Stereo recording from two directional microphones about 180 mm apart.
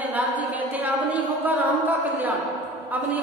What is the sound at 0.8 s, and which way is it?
Speech, 10° right (ahead or behind).